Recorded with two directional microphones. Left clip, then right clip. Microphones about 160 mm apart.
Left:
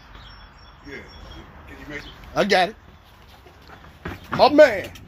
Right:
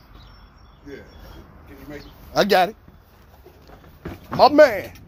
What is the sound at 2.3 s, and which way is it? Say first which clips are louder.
Speech: right 2 dB; 20° right (ahead or behind).